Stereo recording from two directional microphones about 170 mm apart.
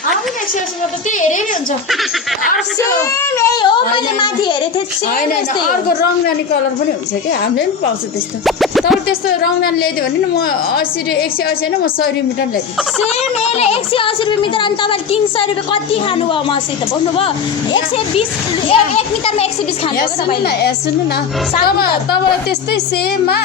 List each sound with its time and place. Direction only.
2.7 s speech: 15° left (ahead or behind)
3.9 s a child's voice: 25° left (ahead or behind)
5.6 s a woman's voice: 60° left (ahead or behind)
8.4 s music: centre (ahead or behind)
10.3 s a woman's voice: 65° left (ahead or behind)
13.4 s speech: 35° left (ahead or behind)
20.0 s a woman's voice: 75° left (ahead or behind)